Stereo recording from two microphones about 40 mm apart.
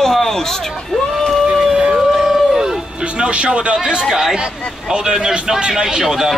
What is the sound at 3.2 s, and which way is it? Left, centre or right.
Speech, right.